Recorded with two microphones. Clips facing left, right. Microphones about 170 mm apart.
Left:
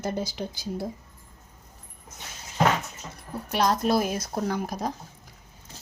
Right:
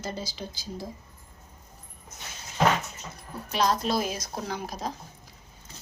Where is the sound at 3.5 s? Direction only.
55° left (ahead or behind).